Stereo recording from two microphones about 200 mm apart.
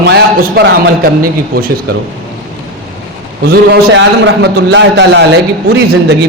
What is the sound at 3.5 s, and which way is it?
A man's voice, 55° right (ahead or behind).